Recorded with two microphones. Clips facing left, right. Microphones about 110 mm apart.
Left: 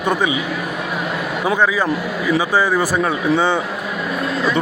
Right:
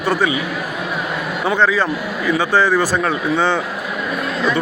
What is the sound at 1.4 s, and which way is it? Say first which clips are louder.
Speech: right 1 dB; 10° left (ahead or behind).